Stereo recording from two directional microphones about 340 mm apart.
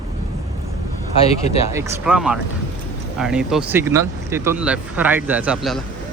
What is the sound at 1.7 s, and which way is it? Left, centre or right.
Speech, centre.